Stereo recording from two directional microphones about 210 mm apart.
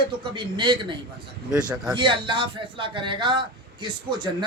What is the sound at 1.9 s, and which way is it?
A man's voice, 20° right (ahead or behind).